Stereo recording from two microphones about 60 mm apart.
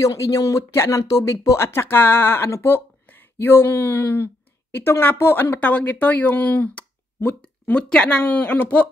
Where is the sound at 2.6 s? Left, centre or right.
Left.